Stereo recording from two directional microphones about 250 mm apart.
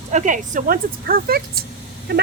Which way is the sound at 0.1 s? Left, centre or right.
Right.